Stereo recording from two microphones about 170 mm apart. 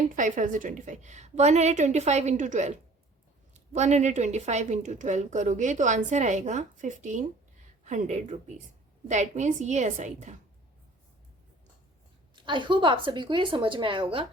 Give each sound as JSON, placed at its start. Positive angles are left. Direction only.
{"t": 0.2, "sound": "a woman's voice", "side_deg": -50}
{"t": 12.5, "sound": "a woman's voice", "side_deg": -30}